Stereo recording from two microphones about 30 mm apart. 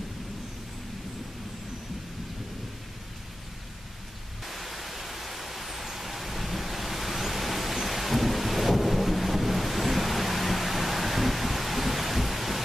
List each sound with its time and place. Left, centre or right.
4.5 s pink noise: centre